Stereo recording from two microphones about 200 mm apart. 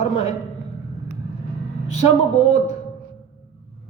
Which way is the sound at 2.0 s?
35° left (ahead or behind).